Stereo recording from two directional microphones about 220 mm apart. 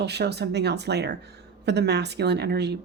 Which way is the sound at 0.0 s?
50° right (ahead or behind).